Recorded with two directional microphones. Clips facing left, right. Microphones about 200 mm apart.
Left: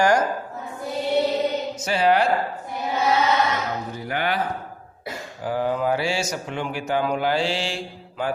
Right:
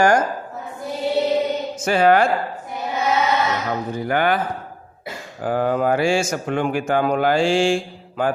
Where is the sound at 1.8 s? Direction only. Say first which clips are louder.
Right 4 dB; 50° right (ahead or behind).